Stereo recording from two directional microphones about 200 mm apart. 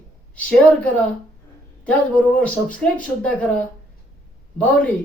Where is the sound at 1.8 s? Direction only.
5° left (ahead or behind).